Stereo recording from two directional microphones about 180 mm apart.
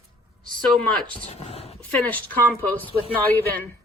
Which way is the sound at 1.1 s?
35° left (ahead or behind).